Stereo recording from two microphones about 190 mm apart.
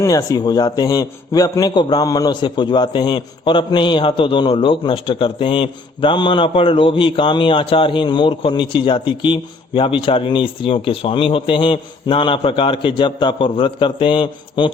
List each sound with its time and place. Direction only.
0.0 s a man's voice: 20° left (ahead or behind)